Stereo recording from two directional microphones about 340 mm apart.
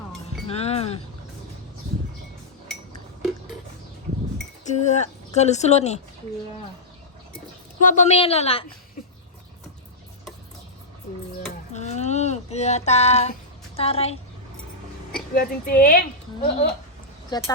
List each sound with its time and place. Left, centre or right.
0.4 s speech: centre
4.7 s speech: centre
7.9 s speech: centre
11.7 s a sound: centre
13.7 s speech: centre
15.4 s speech: left
17.3 s speech: centre